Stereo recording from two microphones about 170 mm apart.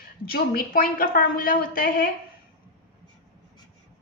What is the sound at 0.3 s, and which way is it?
Speech, 60° left (ahead or behind).